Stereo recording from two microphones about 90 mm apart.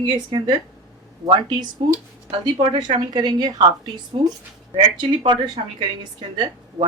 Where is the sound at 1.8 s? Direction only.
70° right (ahead or behind); by 3.6 s 50° right (ahead or behind).